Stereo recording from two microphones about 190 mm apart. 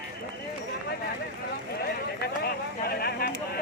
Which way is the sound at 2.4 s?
55° left (ahead or behind).